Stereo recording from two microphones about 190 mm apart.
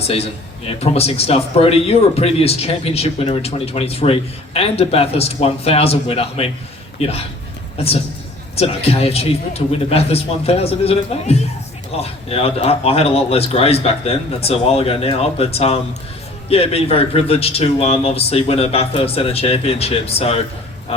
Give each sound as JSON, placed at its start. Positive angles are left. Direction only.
{"t": 0.0, "sound": "a man's voice", "side_deg": 30}
{"t": 8.5, "sound": "speech", "side_deg": 30}